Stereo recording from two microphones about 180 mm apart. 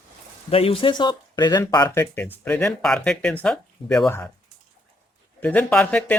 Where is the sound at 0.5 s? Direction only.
30° left (ahead or behind).